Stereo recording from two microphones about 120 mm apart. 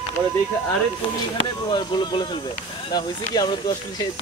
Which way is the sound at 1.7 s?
35° left (ahead or behind).